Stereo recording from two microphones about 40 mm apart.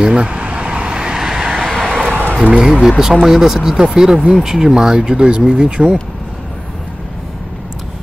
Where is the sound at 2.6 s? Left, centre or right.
Centre.